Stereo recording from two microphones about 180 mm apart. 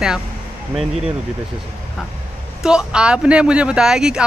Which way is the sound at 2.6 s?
5° right (ahead or behind).